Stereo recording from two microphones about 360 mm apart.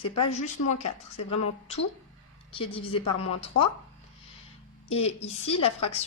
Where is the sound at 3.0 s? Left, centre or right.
Left.